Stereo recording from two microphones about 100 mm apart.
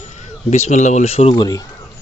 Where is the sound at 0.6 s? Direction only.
90° left.